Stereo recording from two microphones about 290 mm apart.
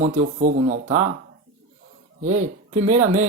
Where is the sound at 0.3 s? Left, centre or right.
Right.